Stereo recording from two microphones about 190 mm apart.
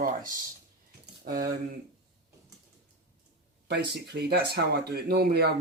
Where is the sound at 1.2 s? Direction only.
50° right (ahead or behind).